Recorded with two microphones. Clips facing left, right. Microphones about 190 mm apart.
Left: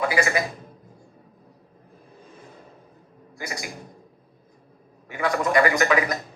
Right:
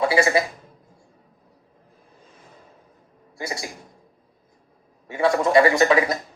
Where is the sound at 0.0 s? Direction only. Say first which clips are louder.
Right 4 dB; 30° right (ahead or behind).